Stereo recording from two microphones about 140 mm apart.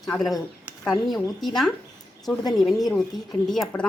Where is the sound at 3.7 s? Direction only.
20° left (ahead or behind).